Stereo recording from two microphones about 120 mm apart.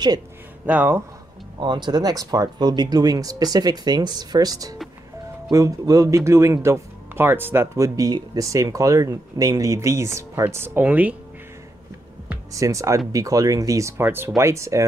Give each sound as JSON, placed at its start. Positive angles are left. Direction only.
{"t": 0.7, "sound": "speech", "side_deg": -15}
{"t": 1.6, "sound": "speech", "side_deg": -40}
{"t": 12.5, "sound": "speech", "side_deg": -25}